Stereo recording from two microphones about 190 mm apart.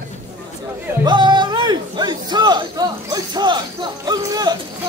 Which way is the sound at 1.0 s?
25° right (ahead or behind).